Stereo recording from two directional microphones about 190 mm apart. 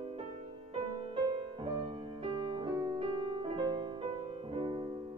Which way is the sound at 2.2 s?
25° right (ahead or behind).